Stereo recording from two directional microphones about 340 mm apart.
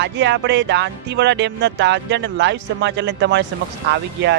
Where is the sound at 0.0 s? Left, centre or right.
Right.